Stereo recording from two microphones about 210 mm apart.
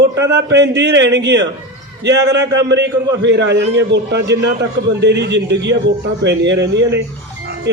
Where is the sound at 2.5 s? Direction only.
55° right (ahead or behind).